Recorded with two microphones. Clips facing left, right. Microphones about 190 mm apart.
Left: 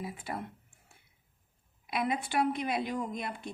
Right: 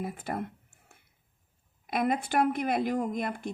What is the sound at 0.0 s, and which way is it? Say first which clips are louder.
Speech: right 4 dB; 50° right (ahead or behind).